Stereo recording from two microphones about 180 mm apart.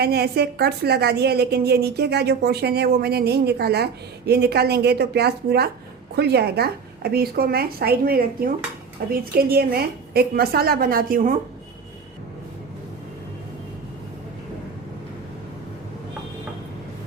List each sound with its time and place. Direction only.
0.0 s a woman's voice: 65° right (ahead or behind)